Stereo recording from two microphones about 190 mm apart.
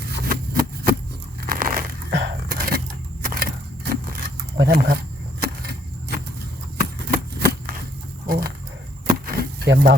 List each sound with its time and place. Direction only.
0.1 s a sound: 50° right (ahead or behind)
4.5 s speech: 55° right (ahead or behind)
5.4 s vehicle: 55° right (ahead or behind)
6.7 s shuffling cards: 50° right (ahead or behind)
8.3 s wild animals: 50° right (ahead or behind)
9.0 s a sound: 50° right (ahead or behind)